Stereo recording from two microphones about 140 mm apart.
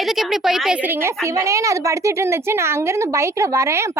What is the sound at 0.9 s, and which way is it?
A woman's voice, 20° right (ahead or behind).